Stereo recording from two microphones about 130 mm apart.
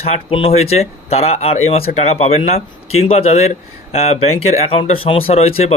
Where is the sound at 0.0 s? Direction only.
45° left (ahead or behind).